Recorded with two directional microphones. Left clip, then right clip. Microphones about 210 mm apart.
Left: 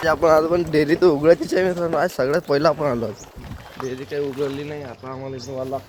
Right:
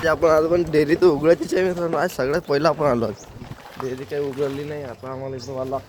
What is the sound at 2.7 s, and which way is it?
Speech, 15° right (ahead or behind).